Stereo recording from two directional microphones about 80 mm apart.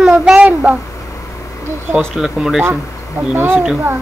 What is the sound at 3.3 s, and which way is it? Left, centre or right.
Speech, right.